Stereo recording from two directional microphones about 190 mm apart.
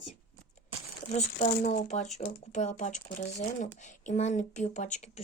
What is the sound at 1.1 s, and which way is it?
Speech, 40° left (ahead or behind).